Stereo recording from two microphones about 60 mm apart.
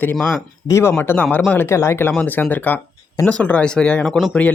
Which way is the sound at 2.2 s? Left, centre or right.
Left.